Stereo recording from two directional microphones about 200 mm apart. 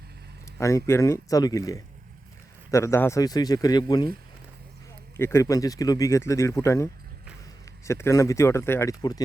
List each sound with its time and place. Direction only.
0.4 s a man's voice: 15° left (ahead or behind)
5.1 s speech: 15° left (ahead or behind)